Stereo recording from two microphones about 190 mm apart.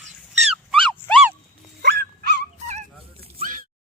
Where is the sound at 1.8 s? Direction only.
55° right (ahead or behind).